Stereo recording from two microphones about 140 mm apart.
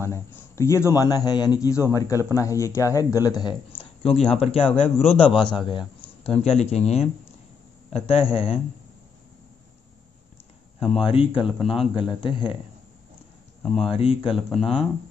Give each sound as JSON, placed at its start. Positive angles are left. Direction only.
{"t": 0.0, "sound": "a man's voice", "side_deg": 20}
{"t": 4.0, "sound": "a man's voice", "side_deg": 45}
{"t": 10.9, "sound": "a man's voice", "side_deg": 40}
{"t": 13.6, "sound": "speech", "side_deg": 5}
{"t": 13.8, "sound": "a man's voice", "side_deg": 40}
{"t": 14.3, "sound": "speech", "side_deg": 0}